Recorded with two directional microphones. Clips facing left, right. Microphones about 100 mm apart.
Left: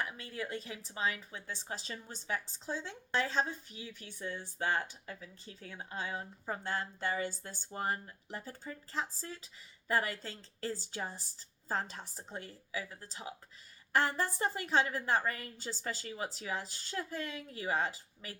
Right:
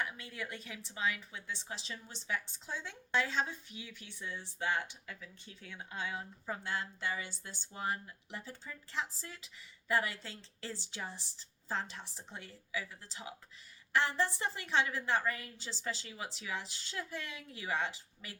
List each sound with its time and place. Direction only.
0.0 s a woman's voice: 35° left (ahead or behind)